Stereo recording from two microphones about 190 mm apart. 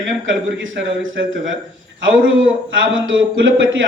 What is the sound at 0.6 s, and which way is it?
Speech, 90° right.